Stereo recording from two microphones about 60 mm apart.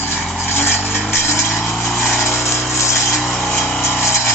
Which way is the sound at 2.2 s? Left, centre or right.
Left.